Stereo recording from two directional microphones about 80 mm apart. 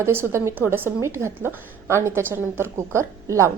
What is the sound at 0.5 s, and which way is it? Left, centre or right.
A woman's voice, right.